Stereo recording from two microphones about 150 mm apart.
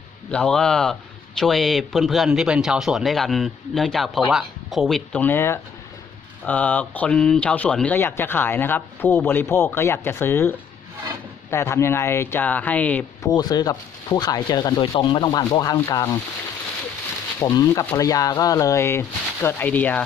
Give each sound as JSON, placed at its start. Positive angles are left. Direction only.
{"t": 0.3, "sound": "a man's voice", "side_deg": 5}
{"t": 11.5, "sound": "speech", "side_deg": 15}
{"t": 13.2, "sound": "speech", "side_deg": 25}
{"t": 17.4, "sound": "speech", "side_deg": 20}